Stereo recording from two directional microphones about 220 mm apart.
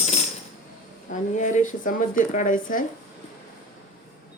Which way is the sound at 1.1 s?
35° left (ahead or behind).